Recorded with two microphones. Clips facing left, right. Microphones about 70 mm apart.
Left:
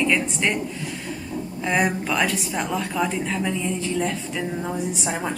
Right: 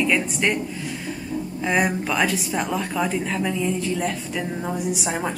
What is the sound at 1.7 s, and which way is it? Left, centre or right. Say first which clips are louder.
A woman's voice: even; centre.